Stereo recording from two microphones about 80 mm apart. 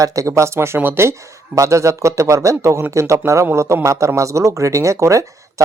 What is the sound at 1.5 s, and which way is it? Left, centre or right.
Speech, right.